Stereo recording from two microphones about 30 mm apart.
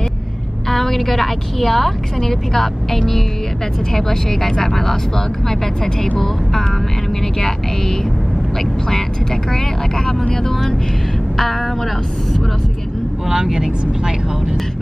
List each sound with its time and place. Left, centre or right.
0.7 s a woman's voice: centre
13.3 s speech: centre